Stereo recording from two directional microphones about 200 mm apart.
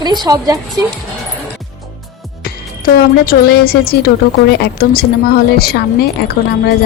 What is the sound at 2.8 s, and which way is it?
A woman's voice, 50° left (ahead or behind).